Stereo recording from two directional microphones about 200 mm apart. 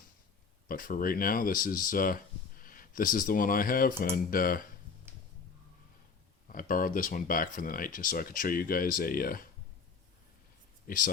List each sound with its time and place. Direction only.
0.7 s speech: 45° left (ahead or behind)
6.5 s speech: 45° left (ahead or behind)
10.8 s speech: 45° left (ahead or behind)